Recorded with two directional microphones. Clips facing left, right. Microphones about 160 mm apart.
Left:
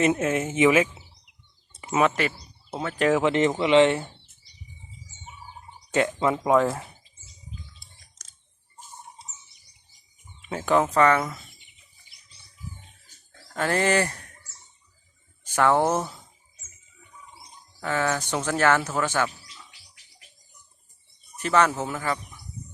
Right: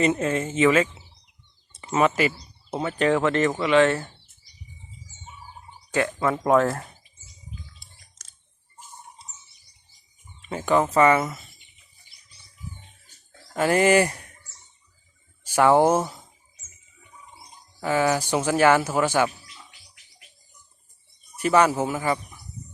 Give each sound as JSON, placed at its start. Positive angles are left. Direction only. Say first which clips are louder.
{"t": 0.0, "sound": "speech", "louder": "even", "side_deg": 5}
{"t": 2.0, "sound": "speech", "louder": "right 2 dB", "side_deg": -5}
{"t": 5.9, "sound": "speech", "louder": "left 1 dB", "side_deg": 20}
{"t": 6.4, "sound": "speech", "louder": "right 2 dB", "side_deg": 0}
{"t": 10.5, "sound": "speech", "louder": "right 1 dB", "side_deg": 0}
{"t": 13.5, "sound": "speech", "louder": "right 4 dB", "side_deg": -10}
{"t": 15.4, "sound": "speech", "louder": "right 4 dB", "side_deg": -10}
{"t": 17.8, "sound": "speech", "louder": "right 4 dB", "side_deg": -10}
{"t": 21.3, "sound": "speech", "louder": "right 3 dB", "side_deg": -10}